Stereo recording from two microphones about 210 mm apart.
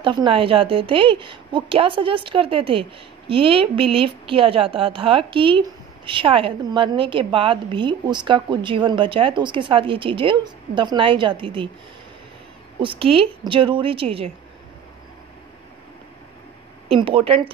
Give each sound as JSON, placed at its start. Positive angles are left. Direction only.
{"t": 0.0, "sound": "a woman's voice", "side_deg": -20}
{"t": 12.8, "sound": "a woman's voice", "side_deg": -25}
{"t": 16.9, "sound": "a woman's voice", "side_deg": -25}